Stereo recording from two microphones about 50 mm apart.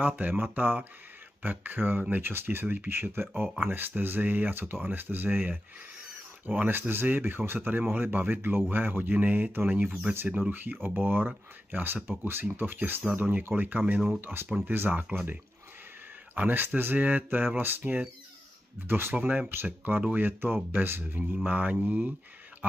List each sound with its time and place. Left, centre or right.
0.0 s speech: right
14.2 s speech: right
15.0 s speech: right
16.3 s speech: right
19.1 s speech: right
19.5 s speech: right